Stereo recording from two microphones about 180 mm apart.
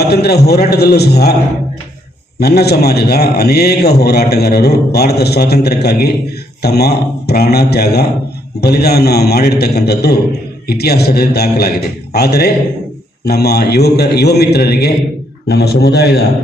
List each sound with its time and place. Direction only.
0.1 s a man's voice: 60° left (ahead or behind)
2.4 s a man's voice: 65° left (ahead or behind)